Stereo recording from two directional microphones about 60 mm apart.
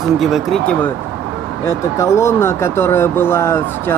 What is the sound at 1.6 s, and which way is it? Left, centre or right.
Speech, left.